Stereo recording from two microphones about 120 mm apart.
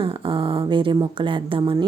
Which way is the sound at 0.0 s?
45° right (ahead or behind).